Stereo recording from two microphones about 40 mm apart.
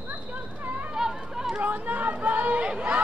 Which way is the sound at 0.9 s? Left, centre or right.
Centre.